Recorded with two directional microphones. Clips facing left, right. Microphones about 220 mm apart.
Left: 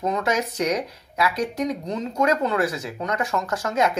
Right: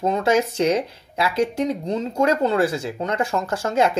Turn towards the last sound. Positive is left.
turn(degrees=-30)  # may be behind; listen again after turning